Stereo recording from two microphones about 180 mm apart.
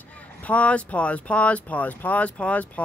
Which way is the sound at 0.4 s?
5° left (ahead or behind).